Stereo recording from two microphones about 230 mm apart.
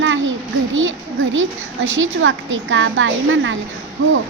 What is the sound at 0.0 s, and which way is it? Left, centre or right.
A child's voice, right.